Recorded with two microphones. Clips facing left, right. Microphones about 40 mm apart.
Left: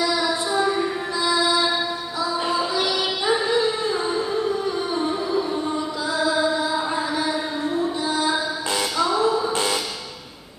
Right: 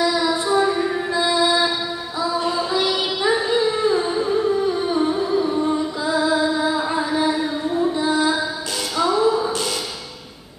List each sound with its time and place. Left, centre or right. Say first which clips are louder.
0.5 s music: right 4 dB; centre
1.1 s music: right 2 dB; right
3.3 s child singing: right 2 dB; centre
5.3 s music: right 4 dB; centre
8.9 s music: right 4 dB; centre